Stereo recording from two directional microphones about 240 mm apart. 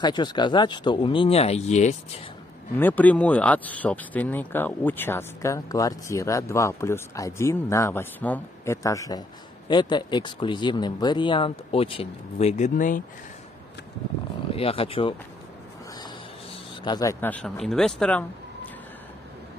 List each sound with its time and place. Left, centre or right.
0.0 s speech: centre
2.8 s speech: centre; by 13.0 s left
14.5 s speech: left
16.8 s speech: centre